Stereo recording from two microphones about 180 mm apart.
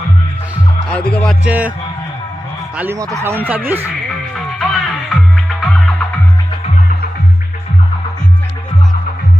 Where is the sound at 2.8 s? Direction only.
15° right (ahead or behind).